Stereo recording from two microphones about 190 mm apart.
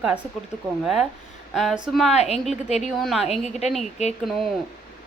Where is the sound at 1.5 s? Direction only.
Centre (ahead or behind).